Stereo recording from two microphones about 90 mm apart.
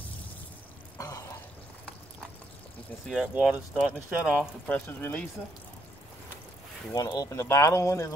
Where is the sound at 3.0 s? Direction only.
5° right (ahead or behind).